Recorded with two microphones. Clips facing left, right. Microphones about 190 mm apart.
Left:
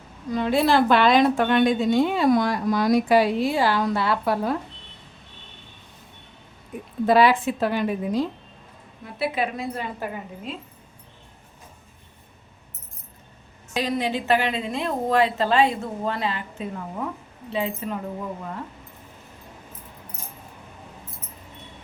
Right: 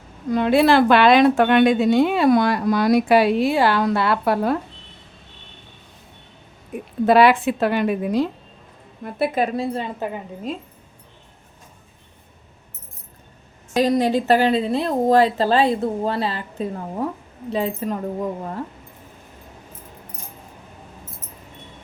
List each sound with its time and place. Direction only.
0.3 s a woman's voice: 65° right (ahead or behind)
7.0 s a woman's voice: 65° right (ahead or behind)
9.0 s speech: 50° right (ahead or behind); by 10.1 s 25° right (ahead or behind)
10.5 s speech: 45° right (ahead or behind)
13.7 s speech: 40° right (ahead or behind)